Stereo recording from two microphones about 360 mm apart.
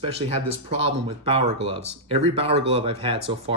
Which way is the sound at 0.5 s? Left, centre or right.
Centre.